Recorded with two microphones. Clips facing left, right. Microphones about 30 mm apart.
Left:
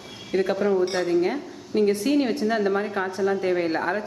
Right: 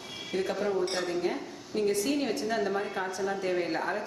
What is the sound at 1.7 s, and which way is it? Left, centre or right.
Speech, left.